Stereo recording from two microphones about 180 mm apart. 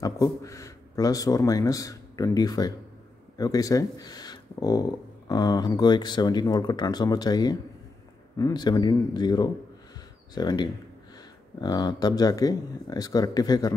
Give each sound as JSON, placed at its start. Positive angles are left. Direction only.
{"t": 0.0, "sound": "speech", "side_deg": 20}